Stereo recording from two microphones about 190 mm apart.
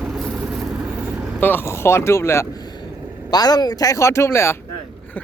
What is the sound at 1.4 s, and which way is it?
Speech, 10° left (ahead or behind).